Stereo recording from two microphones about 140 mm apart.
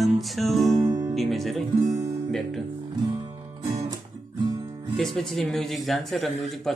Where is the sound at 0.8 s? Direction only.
25° right (ahead or behind).